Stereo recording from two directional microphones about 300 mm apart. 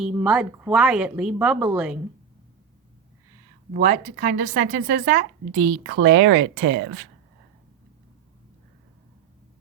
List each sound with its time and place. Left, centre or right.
0.0 s speech: centre
3.7 s speech: right